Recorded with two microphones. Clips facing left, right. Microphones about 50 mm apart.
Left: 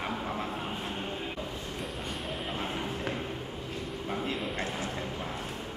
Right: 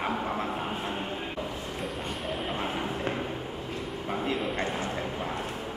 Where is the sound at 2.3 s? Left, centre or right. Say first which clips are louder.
Right 4 dB; centre.